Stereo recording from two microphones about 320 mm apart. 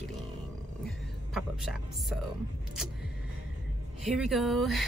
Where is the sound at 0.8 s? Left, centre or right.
Centre.